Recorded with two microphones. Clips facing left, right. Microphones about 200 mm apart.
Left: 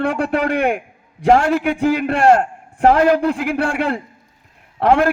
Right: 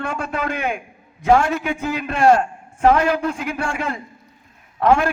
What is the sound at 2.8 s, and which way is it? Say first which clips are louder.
Speech: left 3 dB; 35° left (ahead or behind).